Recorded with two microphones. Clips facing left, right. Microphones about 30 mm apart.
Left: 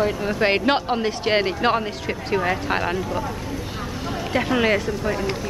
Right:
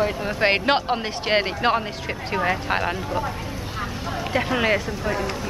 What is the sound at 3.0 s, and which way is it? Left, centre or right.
Speech, right.